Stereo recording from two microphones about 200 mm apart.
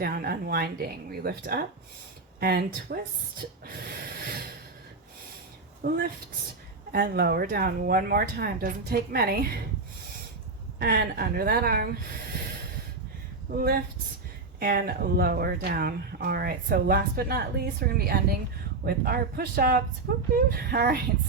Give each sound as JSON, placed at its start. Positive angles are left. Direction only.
{"t": 0.0, "sound": "speech", "side_deg": -50}
{"t": 5.8, "sound": "speech", "side_deg": -50}
{"t": 10.8, "sound": "speech", "side_deg": -50}
{"t": 13.5, "sound": "speech", "side_deg": -45}